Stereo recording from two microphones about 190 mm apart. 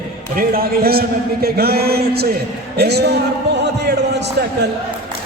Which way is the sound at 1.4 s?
55° right (ahead or behind).